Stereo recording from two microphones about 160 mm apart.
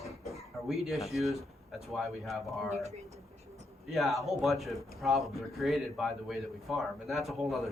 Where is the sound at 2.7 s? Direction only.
45° right (ahead or behind).